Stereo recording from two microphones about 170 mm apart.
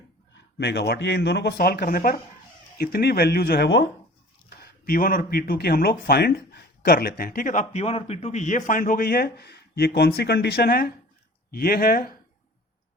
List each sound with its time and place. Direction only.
0.6 s speech: 80° left
4.4 s speech: 65° left (ahead or behind)